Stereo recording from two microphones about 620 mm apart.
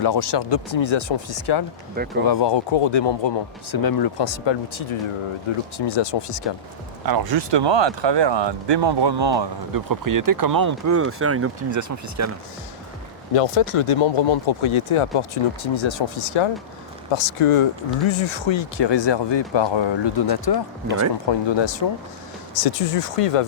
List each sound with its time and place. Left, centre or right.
0.0 s speech: left
7.0 s speech: right
13.3 s speech: left
22.6 s speech: left